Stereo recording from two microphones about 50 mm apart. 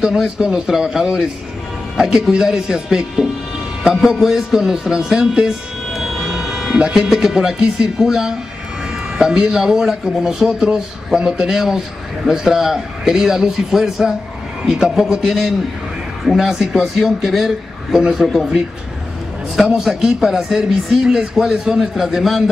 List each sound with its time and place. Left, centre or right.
0.0 s speech: centre
19.5 s speech: centre